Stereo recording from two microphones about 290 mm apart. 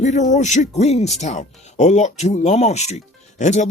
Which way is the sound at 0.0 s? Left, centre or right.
Left.